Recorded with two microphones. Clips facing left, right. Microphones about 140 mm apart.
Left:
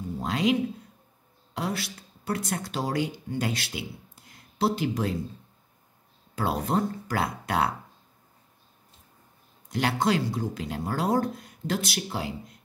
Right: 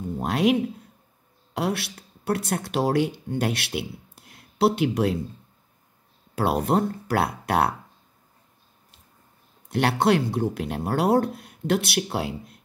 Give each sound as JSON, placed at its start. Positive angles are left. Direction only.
{"t": 0.2, "sound": "speech", "side_deg": -60}
{"t": 1.6, "sound": "speech", "side_deg": -65}
{"t": 6.3, "sound": "speech", "side_deg": -65}
{"t": 9.7, "sound": "speech", "side_deg": -60}